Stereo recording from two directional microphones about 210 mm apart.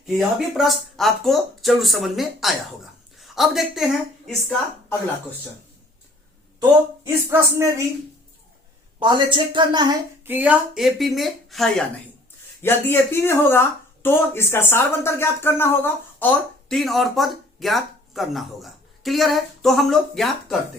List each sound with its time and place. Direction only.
0.0 s speech: centre (ahead or behind)
7.3 s speech: 10° right (ahead or behind)
9.0 s speech: 20° right (ahead or behind)
10.2 s speech: 5° right (ahead or behind)
12.6 s speech: 10° left (ahead or behind)